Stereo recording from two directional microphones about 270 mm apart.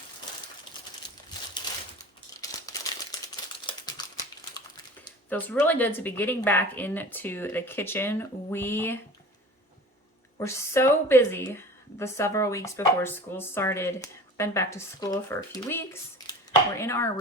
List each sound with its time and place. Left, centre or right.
2.4 s crumpling: centre
5.3 s speech: centre
10.3 s speech: centre